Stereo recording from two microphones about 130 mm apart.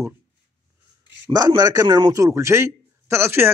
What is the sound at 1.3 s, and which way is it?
A man's voice, 30° right (ahead or behind).